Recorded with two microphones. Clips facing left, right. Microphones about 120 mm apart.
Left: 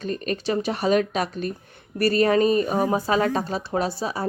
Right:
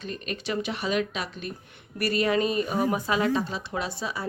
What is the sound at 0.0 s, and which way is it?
A woman's voice, 40° left (ahead or behind).